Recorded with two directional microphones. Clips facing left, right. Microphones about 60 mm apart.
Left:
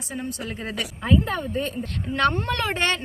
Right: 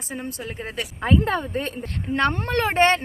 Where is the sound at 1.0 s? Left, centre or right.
Right.